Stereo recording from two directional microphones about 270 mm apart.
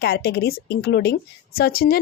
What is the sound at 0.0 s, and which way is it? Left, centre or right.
Speech, left.